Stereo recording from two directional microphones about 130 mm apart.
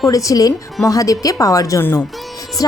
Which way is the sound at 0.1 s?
25° left (ahead or behind).